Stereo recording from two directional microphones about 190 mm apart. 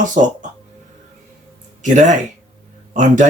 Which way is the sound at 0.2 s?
45° right (ahead or behind).